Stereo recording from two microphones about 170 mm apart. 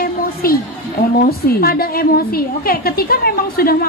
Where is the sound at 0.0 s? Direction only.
60° left (ahead or behind).